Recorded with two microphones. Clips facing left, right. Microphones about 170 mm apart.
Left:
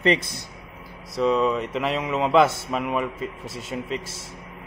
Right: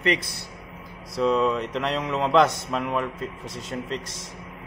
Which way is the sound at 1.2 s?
Centre (ahead or behind).